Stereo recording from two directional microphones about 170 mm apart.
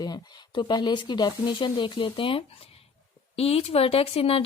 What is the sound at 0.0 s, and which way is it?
Speech, 25° left (ahead or behind).